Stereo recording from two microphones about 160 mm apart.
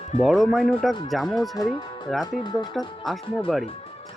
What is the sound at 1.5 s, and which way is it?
Speech, 25° left (ahead or behind).